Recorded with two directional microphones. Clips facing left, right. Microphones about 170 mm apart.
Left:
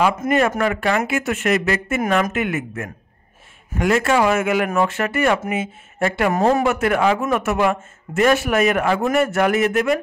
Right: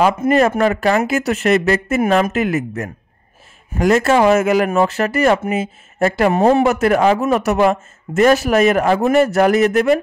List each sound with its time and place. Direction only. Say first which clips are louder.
0.0 s a man's voice: right 4 dB; 35° right (ahead or behind)
6.3 s a man's voice: right 3 dB; 25° right (ahead or behind)